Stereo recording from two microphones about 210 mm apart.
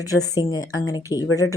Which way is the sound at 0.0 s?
15° left (ahead or behind).